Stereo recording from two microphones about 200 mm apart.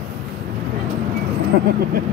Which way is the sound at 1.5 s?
55° right (ahead or behind).